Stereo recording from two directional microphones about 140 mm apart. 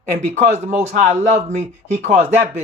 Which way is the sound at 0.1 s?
55° right (ahead or behind).